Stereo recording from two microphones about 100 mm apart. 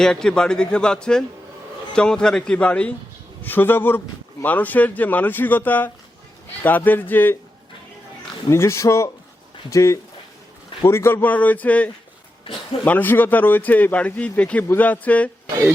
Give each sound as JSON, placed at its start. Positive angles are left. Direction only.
{"t": 0.0, "sound": "a man's voice", "side_deg": 5}
{"t": 8.4, "sound": "a man's voice", "side_deg": 30}
{"t": 12.5, "sound": "speech", "side_deg": 60}
{"t": 12.8, "sound": "speech", "side_deg": 20}